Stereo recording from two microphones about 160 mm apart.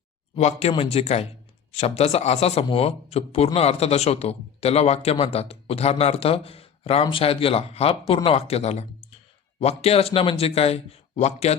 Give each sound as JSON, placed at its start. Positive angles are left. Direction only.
{"t": 0.8, "sound": "a man's voice", "side_deg": 40}